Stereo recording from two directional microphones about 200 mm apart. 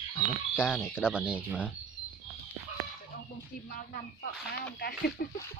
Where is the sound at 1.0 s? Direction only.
5° right (ahead or behind).